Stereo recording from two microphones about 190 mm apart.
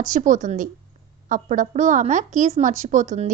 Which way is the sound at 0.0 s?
40° right (ahead or behind).